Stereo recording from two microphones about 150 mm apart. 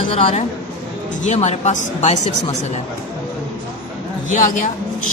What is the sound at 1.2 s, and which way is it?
Speech, 50° left (ahead or behind).